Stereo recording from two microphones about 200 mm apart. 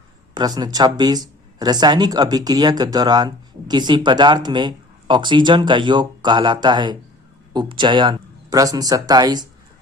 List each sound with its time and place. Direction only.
0.3 s speech: 20° right (ahead or behind)